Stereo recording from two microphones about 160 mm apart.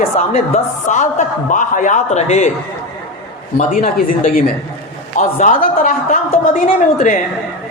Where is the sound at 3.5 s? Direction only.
55° left (ahead or behind).